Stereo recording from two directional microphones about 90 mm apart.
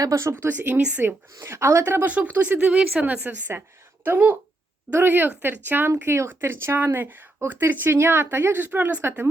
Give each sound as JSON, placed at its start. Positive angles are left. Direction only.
{"t": 0.0, "sound": "speech", "side_deg": -35}
{"t": 0.4, "sound": "speech", "side_deg": -20}
{"t": 1.0, "sound": "speech", "side_deg": -30}